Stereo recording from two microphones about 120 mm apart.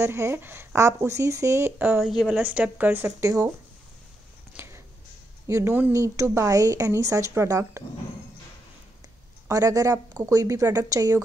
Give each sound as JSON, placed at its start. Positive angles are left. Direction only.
{"t": 0.0, "sound": "speech", "side_deg": -20}
{"t": 2.0, "sound": "speech", "side_deg": 0}
{"t": 2.3, "sound": "speech", "side_deg": -15}
{"t": 4.6, "sound": "a sound", "side_deg": -20}
{"t": 5.5, "sound": "speech", "side_deg": -20}
{"t": 9.5, "sound": "speech", "side_deg": -25}